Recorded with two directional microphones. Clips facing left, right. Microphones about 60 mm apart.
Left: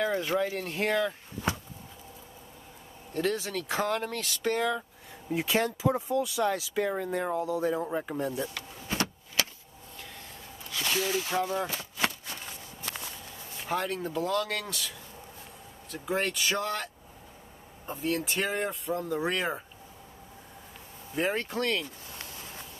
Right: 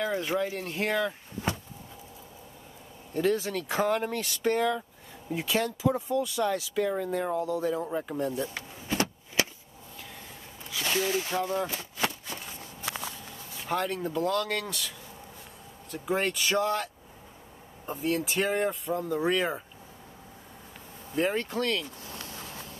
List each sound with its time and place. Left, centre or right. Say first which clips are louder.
0.1 s speech: left 1 dB; centre
3.1 s speech: right 3 dB; centre
5.3 s speech: left 1 dB; centre
8.5 s power windows: right 4 dB; centre
9.4 s a sound: right 3 dB; right
10.7 s a sound: right 1 dB; centre
11.2 s speech: even; centre
12.4 s a sound: right 1 dB; centre
13.7 s speech: right 1 dB; centre
21.1 s speech: right 2 dB; centre